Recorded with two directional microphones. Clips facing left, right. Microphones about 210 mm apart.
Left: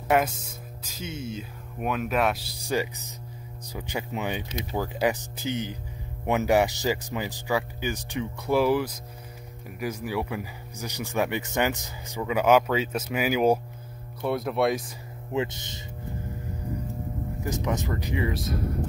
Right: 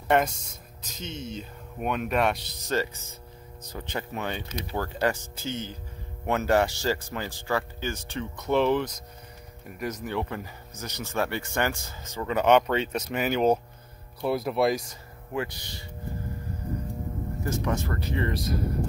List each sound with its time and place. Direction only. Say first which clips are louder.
0.1 s speech: even; 5° left (ahead or behind)
2.7 s speech: left 1 dB; 15° left (ahead or behind)
15.3 s speech: left 3 dB; 20° left (ahead or behind)
17.4 s speech: even; 15° left (ahead or behind)